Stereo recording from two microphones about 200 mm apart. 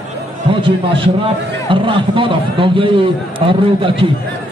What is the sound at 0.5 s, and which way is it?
A man's voice, 25° right (ahead or behind).